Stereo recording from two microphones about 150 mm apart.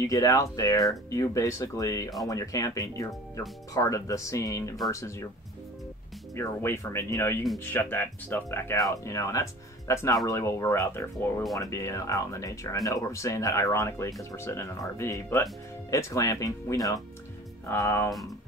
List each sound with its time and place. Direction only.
0.0 s speech: 20° left (ahead or behind)
6.3 s speech: 15° left (ahead or behind)